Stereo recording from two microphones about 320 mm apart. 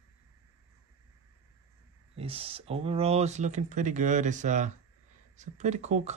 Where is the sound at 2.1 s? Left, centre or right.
Centre.